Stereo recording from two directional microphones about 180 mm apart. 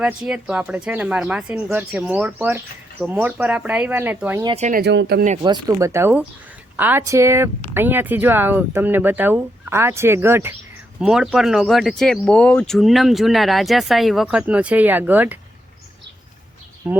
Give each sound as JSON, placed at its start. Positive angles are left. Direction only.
{"t": 0.0, "sound": "speech", "side_deg": -5}
{"t": 4.5, "sound": "speech", "side_deg": -40}
{"t": 4.8, "sound": "speech", "side_deg": -70}
{"t": 5.4, "sound": "speech", "side_deg": -20}